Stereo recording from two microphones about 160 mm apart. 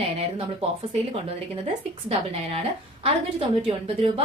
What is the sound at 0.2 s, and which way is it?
Speech, 35° right (ahead or behind).